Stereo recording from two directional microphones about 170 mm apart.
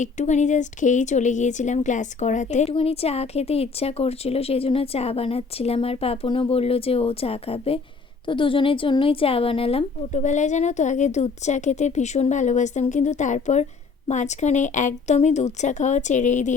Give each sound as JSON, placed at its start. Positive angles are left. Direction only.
{"t": 0.0, "sound": "a woman's voice", "side_deg": 45}